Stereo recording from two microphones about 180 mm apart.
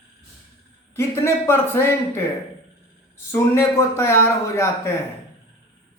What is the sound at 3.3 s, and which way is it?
Speech, 15° left (ahead or behind).